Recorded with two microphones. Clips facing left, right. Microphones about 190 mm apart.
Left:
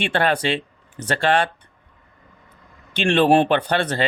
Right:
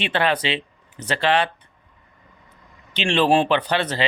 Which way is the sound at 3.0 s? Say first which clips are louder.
Left 3 dB; 55° left (ahead or behind).